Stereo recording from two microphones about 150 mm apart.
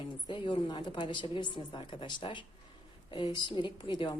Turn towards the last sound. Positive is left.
turn(degrees=30)  # may be behind; listen again after turning